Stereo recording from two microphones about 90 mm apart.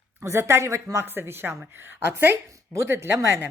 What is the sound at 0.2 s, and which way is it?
Speech, 30° right (ahead or behind).